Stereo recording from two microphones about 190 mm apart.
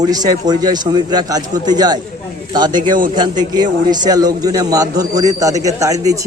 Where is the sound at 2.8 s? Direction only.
45° right (ahead or behind).